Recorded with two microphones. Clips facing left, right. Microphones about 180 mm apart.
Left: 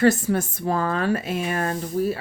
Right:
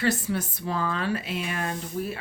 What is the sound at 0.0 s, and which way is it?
Speech, 45° left (ahead or behind).